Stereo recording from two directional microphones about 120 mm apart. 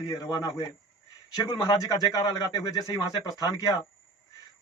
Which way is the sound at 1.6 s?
25° left (ahead or behind).